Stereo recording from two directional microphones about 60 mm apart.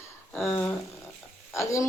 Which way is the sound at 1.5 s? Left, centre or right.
Left.